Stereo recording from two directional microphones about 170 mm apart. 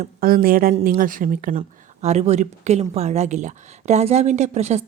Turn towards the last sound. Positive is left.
turn(degrees=-40)  # may be behind; listen again after turning